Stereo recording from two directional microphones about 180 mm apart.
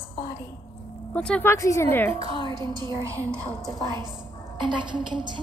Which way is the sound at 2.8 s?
25° right (ahead or behind).